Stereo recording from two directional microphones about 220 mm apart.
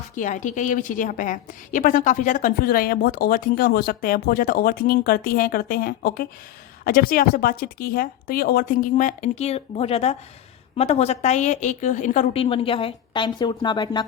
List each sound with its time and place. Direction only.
0.2 s a woman's voice: 35° left (ahead or behind); by 14.0 s 20° left (ahead or behind)